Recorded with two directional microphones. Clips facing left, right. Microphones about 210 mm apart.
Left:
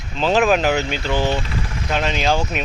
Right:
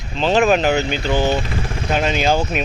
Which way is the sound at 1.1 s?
25° right (ahead or behind).